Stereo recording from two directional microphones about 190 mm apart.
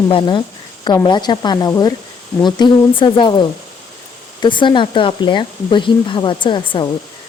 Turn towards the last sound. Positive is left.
turn(degrees=25)  # may be behind; listen again after turning